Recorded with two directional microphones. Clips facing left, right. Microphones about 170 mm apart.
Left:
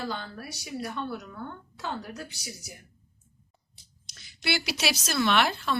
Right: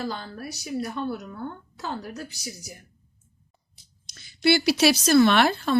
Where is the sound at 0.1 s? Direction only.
40° right (ahead or behind).